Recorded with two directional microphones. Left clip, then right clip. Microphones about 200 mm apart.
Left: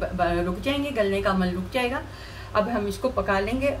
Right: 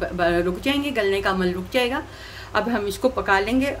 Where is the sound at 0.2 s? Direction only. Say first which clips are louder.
Right 4 dB; 50° right (ahead or behind).